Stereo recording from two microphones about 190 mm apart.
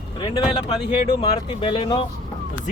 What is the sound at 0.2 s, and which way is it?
Speech, 25° left (ahead or behind).